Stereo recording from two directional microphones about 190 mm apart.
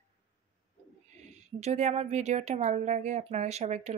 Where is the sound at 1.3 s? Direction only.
35° right (ahead or behind).